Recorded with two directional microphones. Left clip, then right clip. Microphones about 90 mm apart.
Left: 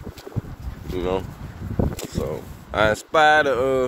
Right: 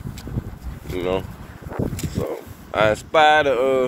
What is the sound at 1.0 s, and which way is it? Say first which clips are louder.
Speech: right 1 dB; 40° left (ahead or behind).